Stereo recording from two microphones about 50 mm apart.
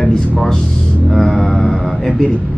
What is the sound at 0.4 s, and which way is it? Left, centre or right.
Speech, centre.